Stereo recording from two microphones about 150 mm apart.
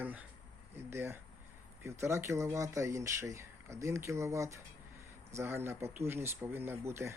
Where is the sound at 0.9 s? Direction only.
15° right (ahead or behind).